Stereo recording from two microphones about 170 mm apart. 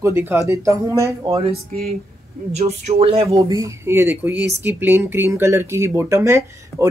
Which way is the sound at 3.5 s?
20° right (ahead or behind).